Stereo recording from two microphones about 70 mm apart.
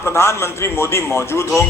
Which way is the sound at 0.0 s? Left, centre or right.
Left.